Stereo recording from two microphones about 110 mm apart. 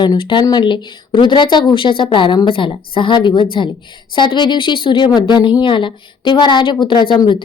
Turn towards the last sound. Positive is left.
turn(degrees=45)  # may be behind; listen again after turning